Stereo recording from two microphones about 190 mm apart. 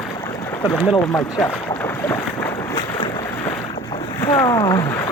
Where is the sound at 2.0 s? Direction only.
15° left (ahead or behind).